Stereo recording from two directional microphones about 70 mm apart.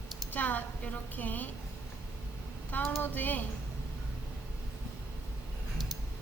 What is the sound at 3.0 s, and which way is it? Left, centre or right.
Speech, left.